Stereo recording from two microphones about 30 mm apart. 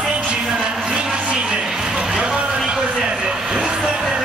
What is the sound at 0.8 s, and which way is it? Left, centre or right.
Vehicle, centre.